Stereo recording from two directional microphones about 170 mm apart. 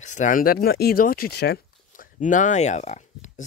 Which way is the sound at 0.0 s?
45° left (ahead or behind).